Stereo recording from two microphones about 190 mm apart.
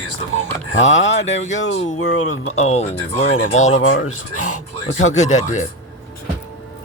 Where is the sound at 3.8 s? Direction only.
90° left.